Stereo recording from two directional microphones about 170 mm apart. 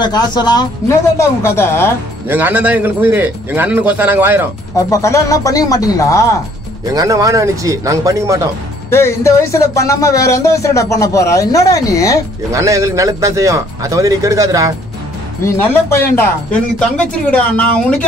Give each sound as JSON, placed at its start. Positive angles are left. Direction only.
{"t": 0.0, "sound": "speech", "side_deg": 25}
{"t": 2.2, "sound": "a man's voice", "side_deg": -10}
{"t": 4.7, "sound": "speech", "side_deg": 20}
{"t": 6.9, "sound": "a man's voice", "side_deg": -20}
{"t": 8.9, "sound": "speech", "side_deg": 15}
{"t": 12.5, "sound": "a man's voice", "side_deg": -20}
{"t": 15.4, "sound": "speech", "side_deg": 15}